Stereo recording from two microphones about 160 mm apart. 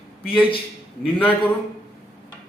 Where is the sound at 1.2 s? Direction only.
10° left (ahead or behind).